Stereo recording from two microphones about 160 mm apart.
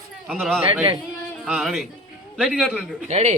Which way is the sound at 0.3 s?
Centre (ahead or behind).